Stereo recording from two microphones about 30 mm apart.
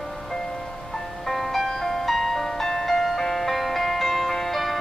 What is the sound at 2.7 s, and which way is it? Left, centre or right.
Music, centre.